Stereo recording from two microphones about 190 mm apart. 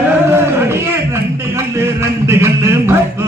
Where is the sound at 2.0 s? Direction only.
15° right (ahead or behind).